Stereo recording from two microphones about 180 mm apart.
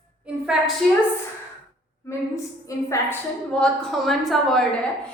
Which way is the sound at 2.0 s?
15° left (ahead or behind).